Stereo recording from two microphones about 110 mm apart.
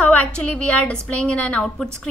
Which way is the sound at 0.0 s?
15° left (ahead or behind).